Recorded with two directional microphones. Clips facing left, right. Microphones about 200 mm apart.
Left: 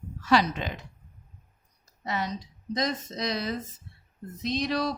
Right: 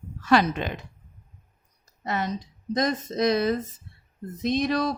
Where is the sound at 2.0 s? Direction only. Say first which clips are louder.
Right 3 dB; 50° right (ahead or behind).